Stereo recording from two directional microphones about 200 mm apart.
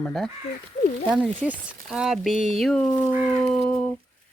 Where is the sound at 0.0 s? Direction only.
Centre (ahead or behind).